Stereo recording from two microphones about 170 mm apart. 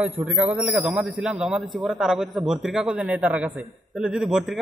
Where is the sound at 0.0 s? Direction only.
10° right (ahead or behind).